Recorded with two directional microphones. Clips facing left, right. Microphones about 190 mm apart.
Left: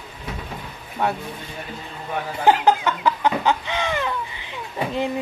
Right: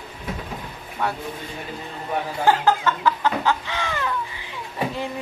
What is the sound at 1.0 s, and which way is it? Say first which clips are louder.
Speech: left 3 dB; 20° left (ahead or behind).